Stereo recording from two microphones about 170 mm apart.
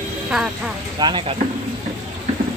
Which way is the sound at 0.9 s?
25° right (ahead or behind).